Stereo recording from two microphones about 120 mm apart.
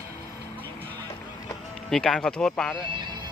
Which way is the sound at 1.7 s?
5° left (ahead or behind).